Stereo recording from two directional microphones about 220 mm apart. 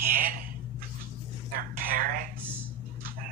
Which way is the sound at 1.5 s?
40° right (ahead or behind).